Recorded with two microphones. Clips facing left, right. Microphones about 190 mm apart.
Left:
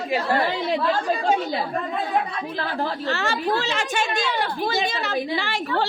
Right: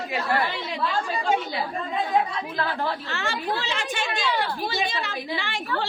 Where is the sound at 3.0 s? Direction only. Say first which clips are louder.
Left 5 dB; 40° left (ahead or behind).